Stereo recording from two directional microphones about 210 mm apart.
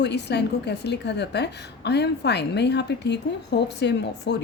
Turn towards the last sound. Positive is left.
turn(degrees=55)  # may be behind; listen again after turning